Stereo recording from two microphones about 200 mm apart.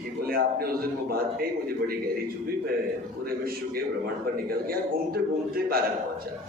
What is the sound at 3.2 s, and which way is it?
A man's voice, 50° right (ahead or behind).